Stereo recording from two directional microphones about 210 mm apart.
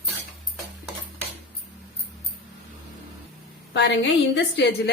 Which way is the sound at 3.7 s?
55° left (ahead or behind).